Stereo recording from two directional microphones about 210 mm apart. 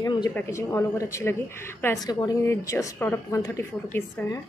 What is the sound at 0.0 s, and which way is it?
A woman's voice, 20° left (ahead or behind).